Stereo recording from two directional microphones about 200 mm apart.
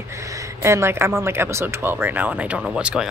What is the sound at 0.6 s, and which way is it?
Speech, 10° right (ahead or behind).